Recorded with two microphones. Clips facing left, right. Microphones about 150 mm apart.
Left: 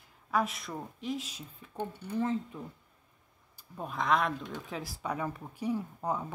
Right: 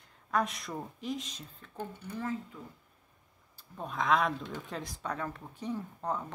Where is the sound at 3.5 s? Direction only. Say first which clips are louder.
Left 1 dB; 5° left (ahead or behind).